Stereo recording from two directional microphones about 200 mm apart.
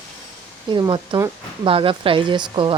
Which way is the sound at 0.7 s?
20° right (ahead or behind).